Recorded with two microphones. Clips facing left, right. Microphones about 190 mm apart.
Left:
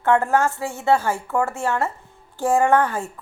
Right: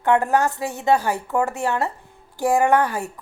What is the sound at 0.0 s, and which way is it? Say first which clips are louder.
A woman's voice: even; 15° right (ahead or behind).